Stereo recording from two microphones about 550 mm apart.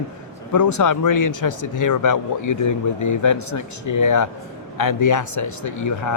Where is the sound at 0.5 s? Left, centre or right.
Left.